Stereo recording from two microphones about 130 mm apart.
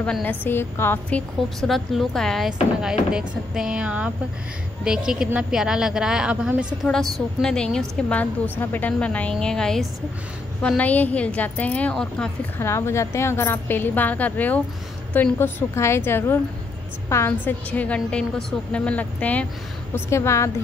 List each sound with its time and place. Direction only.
0.0 s a woman's voice: 10° left (ahead or behind)
1.6 s a woman's voice: centre (ahead or behind)
12.5 s a woman's voice: 20° left (ahead or behind)
20.1 s a woman's voice: 20° left (ahead or behind)